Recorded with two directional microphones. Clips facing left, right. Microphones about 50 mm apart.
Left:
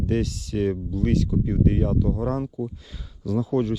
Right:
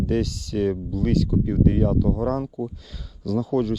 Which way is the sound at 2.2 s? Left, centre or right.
Centre.